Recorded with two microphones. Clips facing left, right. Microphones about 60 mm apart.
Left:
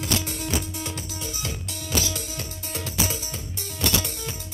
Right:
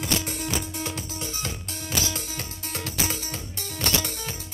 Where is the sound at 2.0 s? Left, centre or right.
Right.